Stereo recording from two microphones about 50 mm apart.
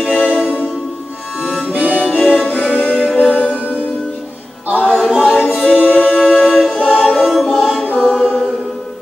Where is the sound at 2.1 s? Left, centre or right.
Left.